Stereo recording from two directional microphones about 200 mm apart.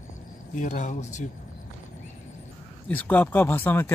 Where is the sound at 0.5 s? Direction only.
35° left (ahead or behind).